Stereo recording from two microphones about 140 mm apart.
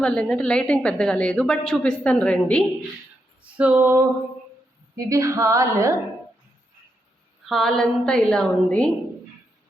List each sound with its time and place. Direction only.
0.0 s a woman's voice: 5° left (ahead or behind)
3.4 s a sound: 10° right (ahead or behind)
4.9 s a woman's voice: 25° right (ahead or behind)
7.4 s a woman's voice: centre (ahead or behind)